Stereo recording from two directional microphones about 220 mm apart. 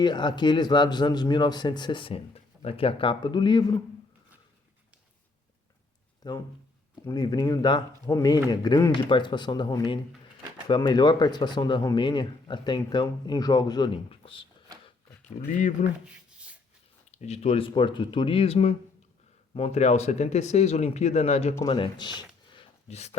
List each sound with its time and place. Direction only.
0.0 s speech: 20° left (ahead or behind)
6.2 s speech: 20° left (ahead or behind)
15.4 s speech: 35° left (ahead or behind)
17.1 s speech: 30° left (ahead or behind)
21.5 s speech: 20° left (ahead or behind)
22.5 s a sound: 30° left (ahead or behind)